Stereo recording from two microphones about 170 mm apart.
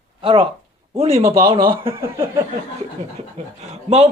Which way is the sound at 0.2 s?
30° right (ahead or behind).